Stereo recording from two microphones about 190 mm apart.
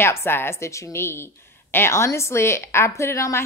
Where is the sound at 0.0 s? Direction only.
10° left (ahead or behind).